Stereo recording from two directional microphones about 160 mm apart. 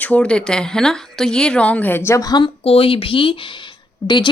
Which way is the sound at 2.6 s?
35° left (ahead or behind).